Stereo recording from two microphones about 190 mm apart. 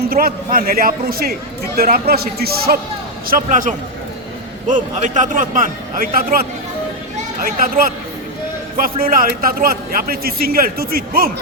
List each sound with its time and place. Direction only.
0.1 s a man's voice: 50° right (ahead or behind)